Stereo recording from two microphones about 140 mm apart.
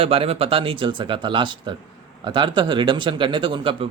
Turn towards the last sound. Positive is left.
turn(degrees=-35)  # may be behind; listen again after turning